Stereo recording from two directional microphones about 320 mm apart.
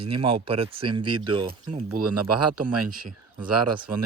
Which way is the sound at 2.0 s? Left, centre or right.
Right.